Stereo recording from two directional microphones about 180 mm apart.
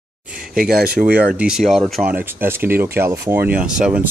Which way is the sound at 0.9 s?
10° right (ahead or behind).